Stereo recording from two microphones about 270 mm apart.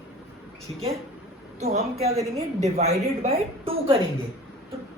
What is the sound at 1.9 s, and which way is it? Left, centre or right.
A woman's voice, right.